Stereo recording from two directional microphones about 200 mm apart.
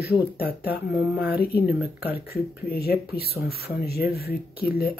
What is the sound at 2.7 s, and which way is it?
Speech, 50° left (ahead or behind).